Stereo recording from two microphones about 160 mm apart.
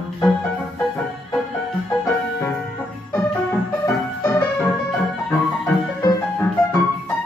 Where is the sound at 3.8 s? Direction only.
15° left (ahead or behind).